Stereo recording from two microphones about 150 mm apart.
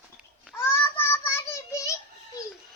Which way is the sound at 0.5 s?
15° left (ahead or behind).